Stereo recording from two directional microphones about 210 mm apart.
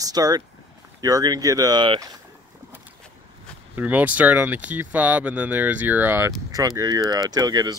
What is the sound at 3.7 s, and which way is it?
Speech, 5° right (ahead or behind).